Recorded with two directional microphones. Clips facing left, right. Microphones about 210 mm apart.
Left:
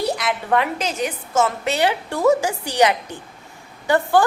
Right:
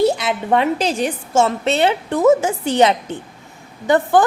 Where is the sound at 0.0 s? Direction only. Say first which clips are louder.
Right 6 dB; 30° right (ahead or behind).